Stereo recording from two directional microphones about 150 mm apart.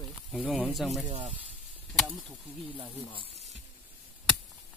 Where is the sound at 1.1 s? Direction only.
50° right (ahead or behind).